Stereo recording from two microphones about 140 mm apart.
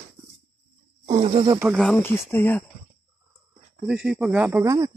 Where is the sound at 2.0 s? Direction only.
15° left (ahead or behind).